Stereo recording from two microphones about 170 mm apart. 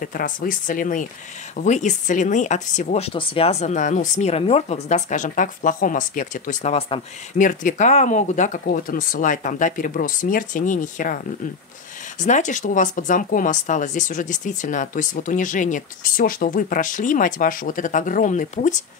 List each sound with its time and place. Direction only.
0.0 s speech: 55° left (ahead or behind)
12.2 s speech: 45° left (ahead or behind)